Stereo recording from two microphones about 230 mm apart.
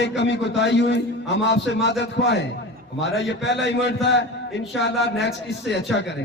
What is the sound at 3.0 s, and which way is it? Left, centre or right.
A man's voice, left.